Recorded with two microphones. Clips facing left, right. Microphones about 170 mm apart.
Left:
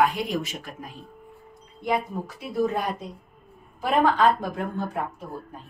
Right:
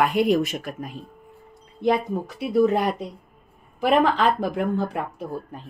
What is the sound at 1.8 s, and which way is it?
A woman's voice, 75° right (ahead or behind).